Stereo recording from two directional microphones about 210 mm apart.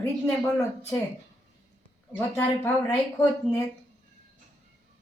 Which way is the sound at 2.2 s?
10° left (ahead or behind).